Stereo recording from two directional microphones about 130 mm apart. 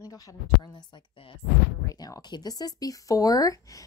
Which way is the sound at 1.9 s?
30° left (ahead or behind).